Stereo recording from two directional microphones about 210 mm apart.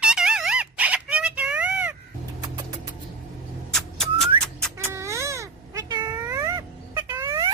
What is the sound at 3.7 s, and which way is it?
Whistling, centre (ahead or behind).